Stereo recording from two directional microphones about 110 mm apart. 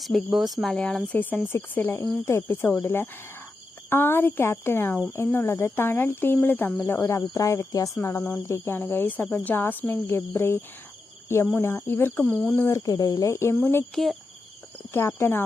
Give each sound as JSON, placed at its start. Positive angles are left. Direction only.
{"t": 0.3, "sound": "speech", "side_deg": 0}
{"t": 12.3, "sound": "speech", "side_deg": 5}
{"t": 12.6, "sound": "speech", "side_deg": 30}
{"t": 13.9, "sound": "speech", "side_deg": 0}
{"t": 14.9, "sound": "speech", "side_deg": 20}